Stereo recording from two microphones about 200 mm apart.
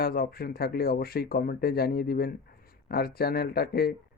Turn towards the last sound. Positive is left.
turn(degrees=50)  # may be behind; listen again after turning